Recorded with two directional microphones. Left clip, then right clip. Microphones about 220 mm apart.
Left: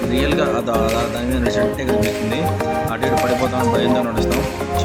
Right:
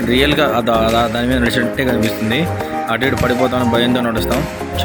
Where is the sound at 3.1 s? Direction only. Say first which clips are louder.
Right 2 dB; 5° right (ahead or behind).